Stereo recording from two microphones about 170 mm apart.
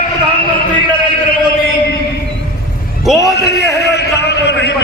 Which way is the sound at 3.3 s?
75° left (ahead or behind).